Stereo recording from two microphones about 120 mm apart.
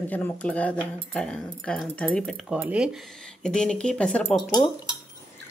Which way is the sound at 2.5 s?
10° right (ahead or behind).